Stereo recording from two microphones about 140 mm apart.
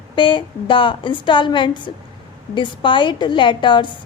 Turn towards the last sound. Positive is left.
turn(degrees=35)  # may be behind; listen again after turning